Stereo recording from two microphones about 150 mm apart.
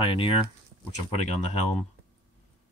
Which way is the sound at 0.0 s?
35° left (ahead or behind).